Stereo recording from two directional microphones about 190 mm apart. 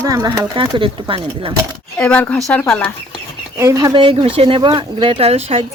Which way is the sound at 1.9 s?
5° left (ahead or behind).